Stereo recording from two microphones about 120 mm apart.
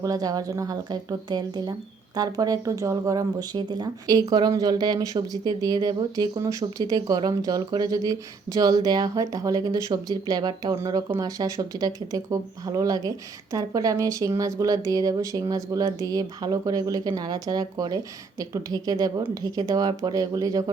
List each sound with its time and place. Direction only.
0.0 s speech: 30° right (ahead or behind)